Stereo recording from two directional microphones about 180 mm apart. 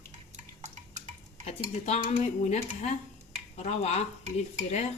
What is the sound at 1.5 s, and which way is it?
Speech, 40° left (ahead or behind).